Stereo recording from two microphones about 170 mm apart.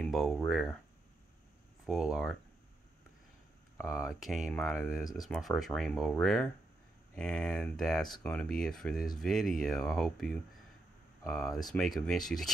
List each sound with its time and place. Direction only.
0.0 s speech: centre (ahead or behind)
1.9 s speech: centre (ahead or behind)
3.8 s speech: 5° right (ahead or behind)
5.0 s speech: 20° left (ahead or behind)
5.3 s speech: centre (ahead or behind)